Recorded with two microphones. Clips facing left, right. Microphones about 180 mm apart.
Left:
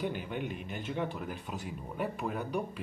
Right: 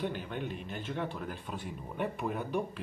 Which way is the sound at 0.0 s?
10° left (ahead or behind).